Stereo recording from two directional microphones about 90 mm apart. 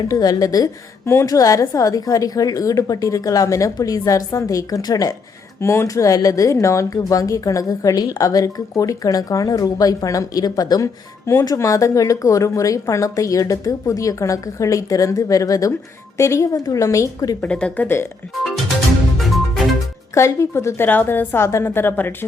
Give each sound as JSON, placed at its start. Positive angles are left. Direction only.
{"t": 0.1, "sound": "speech", "side_deg": 45}
{"t": 5.5, "sound": "speech", "side_deg": 30}
{"t": 17.4, "sound": "a woman's voice", "side_deg": 15}
{"t": 19.1, "sound": "music", "side_deg": 0}
{"t": 20.1, "sound": "a woman's voice", "side_deg": 30}